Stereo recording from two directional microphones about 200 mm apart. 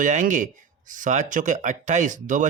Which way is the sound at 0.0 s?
40° right (ahead or behind).